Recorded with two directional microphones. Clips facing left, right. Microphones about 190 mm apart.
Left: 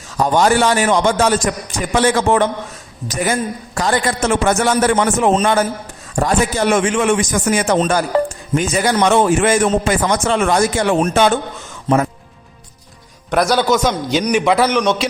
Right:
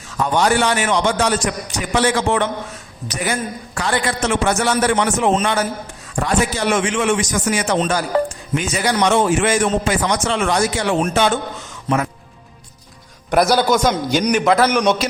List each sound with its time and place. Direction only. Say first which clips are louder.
0.2 s a man's voice: left 3 dB; 45° left (ahead or behind)
3.8 s a man's voice: left 3 dB; 40° left (ahead or behind)
13.3 s a man's voice: even; 5° right (ahead or behind)
14.7 s a man's voice: even; 15° right (ahead or behind)